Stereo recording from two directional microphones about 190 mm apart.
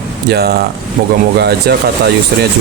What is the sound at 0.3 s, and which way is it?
Speech, 55° right (ahead or behind).